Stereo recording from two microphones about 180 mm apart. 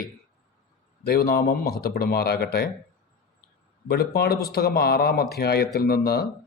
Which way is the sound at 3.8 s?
60° left (ahead or behind).